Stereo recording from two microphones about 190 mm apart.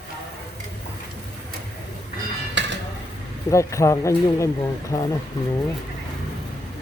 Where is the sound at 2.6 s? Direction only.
70° right (ahead or behind).